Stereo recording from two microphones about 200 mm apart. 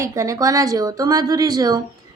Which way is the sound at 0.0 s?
15° right (ahead or behind).